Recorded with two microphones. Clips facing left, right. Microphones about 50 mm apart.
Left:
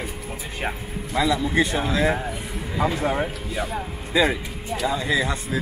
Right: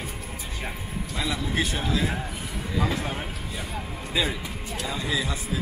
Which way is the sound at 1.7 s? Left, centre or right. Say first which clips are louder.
Left 5 dB; left.